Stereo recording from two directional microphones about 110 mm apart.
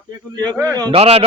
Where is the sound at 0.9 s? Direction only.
65° right (ahead or behind).